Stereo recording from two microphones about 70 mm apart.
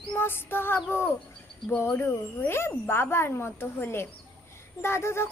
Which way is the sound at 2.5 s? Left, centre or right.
Left.